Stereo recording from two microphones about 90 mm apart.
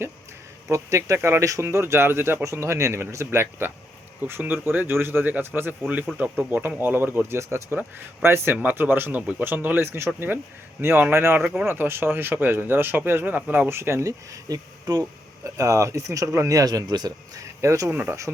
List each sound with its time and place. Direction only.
0.7 s speech: 35° right (ahead or behind)
17.4 s speech: 35° right (ahead or behind)
17.9 s speech: 20° right (ahead or behind)